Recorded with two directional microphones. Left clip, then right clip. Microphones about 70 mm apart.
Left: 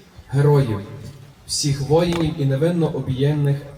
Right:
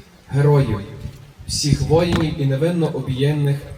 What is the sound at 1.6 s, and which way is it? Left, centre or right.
Speech, right.